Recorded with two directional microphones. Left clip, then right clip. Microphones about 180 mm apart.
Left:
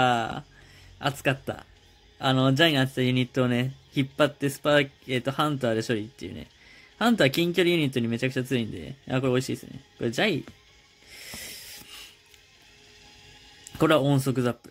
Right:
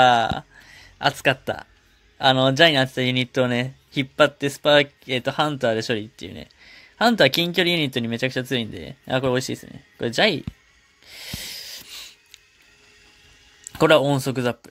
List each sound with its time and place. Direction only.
0.0 s speech: 15° right (ahead or behind)
11.1 s a sound: 10° right (ahead or behind)
13.7 s speech: 15° right (ahead or behind)